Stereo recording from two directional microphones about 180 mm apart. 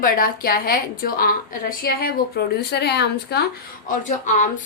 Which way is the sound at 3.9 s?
45° left (ahead or behind).